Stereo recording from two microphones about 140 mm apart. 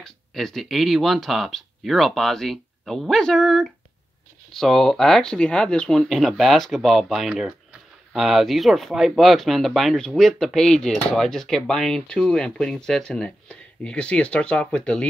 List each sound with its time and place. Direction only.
0.0 s speech: 5° left (ahead or behind)